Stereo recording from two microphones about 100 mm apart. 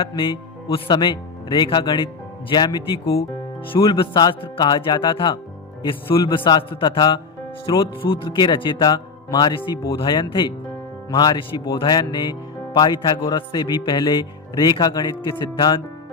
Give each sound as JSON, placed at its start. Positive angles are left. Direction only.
{"t": 0.2, "sound": "speech", "side_deg": 60}
{"t": 3.8, "sound": "speech", "side_deg": 55}